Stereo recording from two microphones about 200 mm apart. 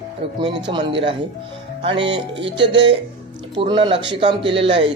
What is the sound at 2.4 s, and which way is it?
Speech, 60° right (ahead or behind).